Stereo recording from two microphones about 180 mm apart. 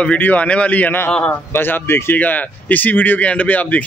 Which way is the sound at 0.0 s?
10° left (ahead or behind).